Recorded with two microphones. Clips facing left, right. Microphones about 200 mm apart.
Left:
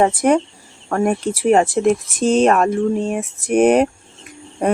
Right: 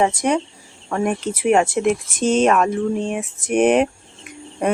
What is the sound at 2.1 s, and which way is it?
Speech, centre (ahead or behind).